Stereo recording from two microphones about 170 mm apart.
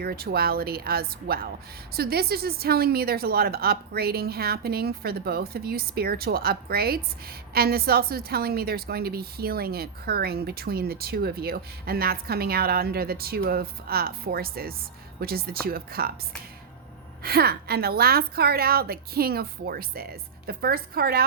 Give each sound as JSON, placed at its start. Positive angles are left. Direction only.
{"t": 0.0, "sound": "a woman's voice", "side_deg": -65}
{"t": 17.2, "sound": "a woman's voice", "side_deg": -65}